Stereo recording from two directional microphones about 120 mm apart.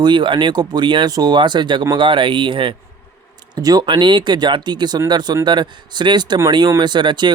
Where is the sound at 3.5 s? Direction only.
35° right (ahead or behind).